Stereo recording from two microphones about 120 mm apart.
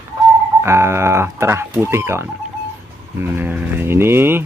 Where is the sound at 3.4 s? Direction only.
15° right (ahead or behind).